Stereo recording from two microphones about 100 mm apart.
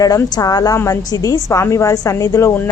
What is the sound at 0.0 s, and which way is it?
A woman's voice, 40° left (ahead or behind).